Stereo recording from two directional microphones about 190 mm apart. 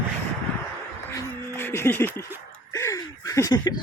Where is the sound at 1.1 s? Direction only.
15° left (ahead or behind).